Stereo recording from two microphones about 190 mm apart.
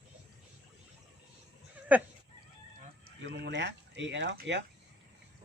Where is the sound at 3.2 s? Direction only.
65° right (ahead or behind).